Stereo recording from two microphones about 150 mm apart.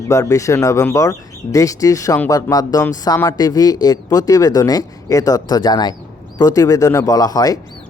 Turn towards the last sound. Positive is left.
turn(degrees=25)  # may be behind; listen again after turning